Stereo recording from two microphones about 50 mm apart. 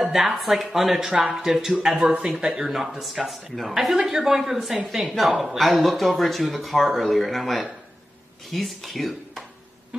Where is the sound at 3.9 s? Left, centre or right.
Centre.